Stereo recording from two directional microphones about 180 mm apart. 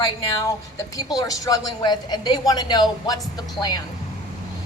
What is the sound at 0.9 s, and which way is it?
A woman's voice, 20° left (ahead or behind).